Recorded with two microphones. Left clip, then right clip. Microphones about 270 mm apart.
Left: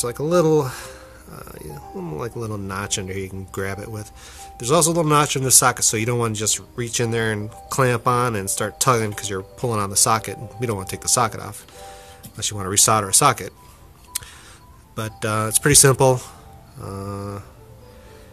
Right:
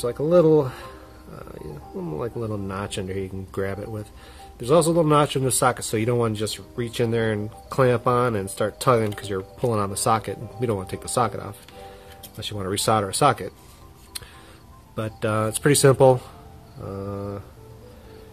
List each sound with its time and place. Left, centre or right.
0.0 s speech: centre
15.0 s speech: centre